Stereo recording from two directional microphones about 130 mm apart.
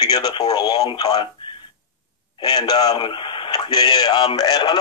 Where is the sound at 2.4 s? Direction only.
30° left (ahead or behind).